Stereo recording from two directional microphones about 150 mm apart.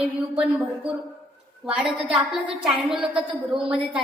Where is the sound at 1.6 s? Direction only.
5° right (ahead or behind).